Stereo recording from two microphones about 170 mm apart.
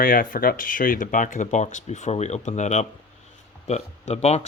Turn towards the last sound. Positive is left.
turn(degrees=40)  # may be behind; listen again after turning